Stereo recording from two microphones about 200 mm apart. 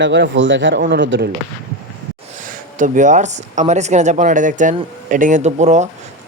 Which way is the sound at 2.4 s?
40° right (ahead or behind).